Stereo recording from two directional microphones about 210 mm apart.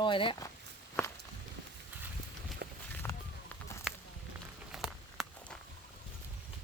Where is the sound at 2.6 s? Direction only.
50° right (ahead or behind).